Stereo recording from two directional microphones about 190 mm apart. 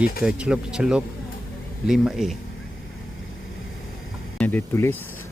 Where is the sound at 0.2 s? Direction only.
5° right (ahead or behind).